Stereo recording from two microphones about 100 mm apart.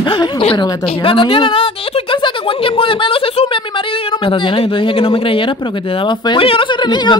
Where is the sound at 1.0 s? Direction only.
60° left (ahead or behind).